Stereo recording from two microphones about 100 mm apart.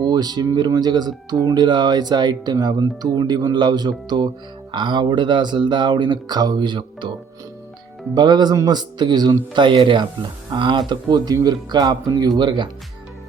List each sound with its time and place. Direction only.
0.0 s speech: 40° right (ahead or behind)
8.1 s speech: 45° right (ahead or behind)